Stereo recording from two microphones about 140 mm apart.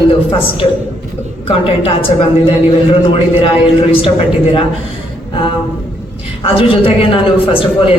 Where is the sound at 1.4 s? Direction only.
40° left (ahead or behind).